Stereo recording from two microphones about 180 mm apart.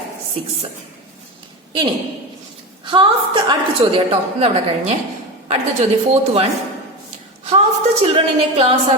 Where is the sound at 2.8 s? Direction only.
25° right (ahead or behind).